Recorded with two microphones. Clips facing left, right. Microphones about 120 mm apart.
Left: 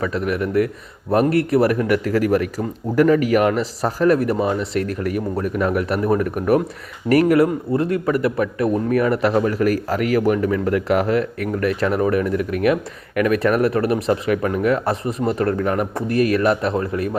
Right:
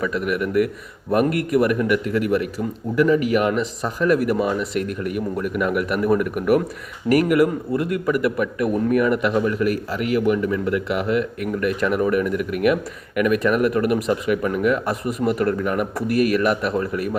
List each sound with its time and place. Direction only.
0.1 s a man's voice: 30° left (ahead or behind)
15.4 s a man's voice: 45° left (ahead or behind)